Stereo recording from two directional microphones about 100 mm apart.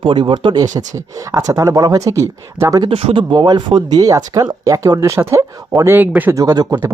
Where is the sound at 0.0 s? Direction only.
55° right (ahead or behind).